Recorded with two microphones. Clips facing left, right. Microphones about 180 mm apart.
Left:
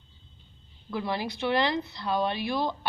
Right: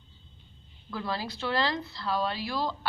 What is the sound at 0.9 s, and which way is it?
A woman's voice, 15° left (ahead or behind).